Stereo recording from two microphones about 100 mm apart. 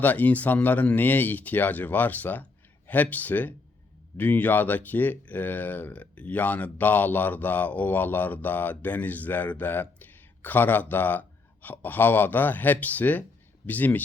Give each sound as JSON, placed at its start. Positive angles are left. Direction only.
{"t": 0.0, "sound": "speech", "side_deg": 15}